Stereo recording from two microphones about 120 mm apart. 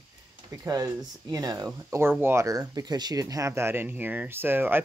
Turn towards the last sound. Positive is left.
turn(degrees=-15)  # may be behind; listen again after turning